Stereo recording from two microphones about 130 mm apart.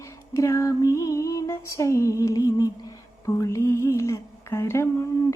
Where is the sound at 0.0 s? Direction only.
25° left (ahead or behind).